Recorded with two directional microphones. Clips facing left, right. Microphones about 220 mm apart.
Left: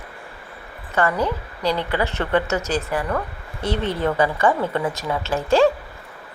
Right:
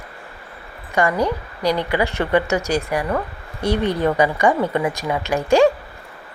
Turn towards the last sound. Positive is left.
turn(degrees=-15)  # may be behind; listen again after turning